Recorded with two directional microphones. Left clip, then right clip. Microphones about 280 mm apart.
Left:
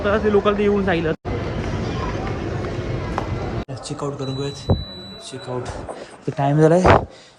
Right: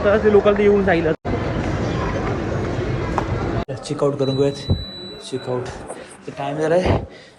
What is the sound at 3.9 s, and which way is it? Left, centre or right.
Speech, centre.